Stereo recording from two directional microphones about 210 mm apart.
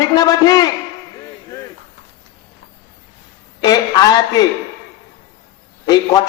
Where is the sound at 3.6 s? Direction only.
20° left (ahead or behind).